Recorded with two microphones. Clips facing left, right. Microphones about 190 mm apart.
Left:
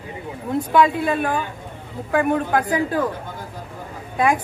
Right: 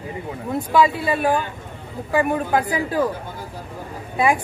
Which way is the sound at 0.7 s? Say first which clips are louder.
Even; 5° right (ahead or behind).